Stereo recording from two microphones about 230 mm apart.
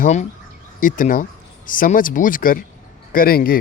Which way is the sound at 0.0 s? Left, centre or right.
Left.